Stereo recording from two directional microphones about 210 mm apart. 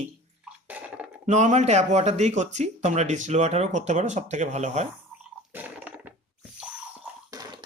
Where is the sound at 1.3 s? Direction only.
35° right (ahead or behind).